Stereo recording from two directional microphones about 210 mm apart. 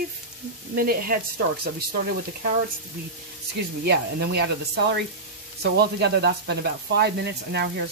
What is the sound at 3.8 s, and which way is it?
Speech, 50° right (ahead or behind).